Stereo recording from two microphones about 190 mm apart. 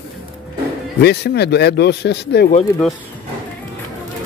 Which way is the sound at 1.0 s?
60° left (ahead or behind).